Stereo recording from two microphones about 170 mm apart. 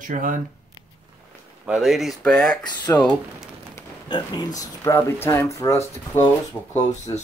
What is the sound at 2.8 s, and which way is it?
Speech, 25° left (ahead or behind).